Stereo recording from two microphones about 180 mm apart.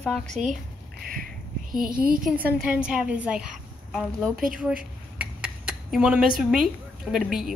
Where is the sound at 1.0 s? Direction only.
50° right (ahead or behind).